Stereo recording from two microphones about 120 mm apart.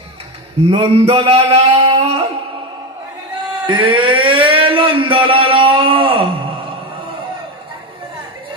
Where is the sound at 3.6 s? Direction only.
45° right (ahead or behind).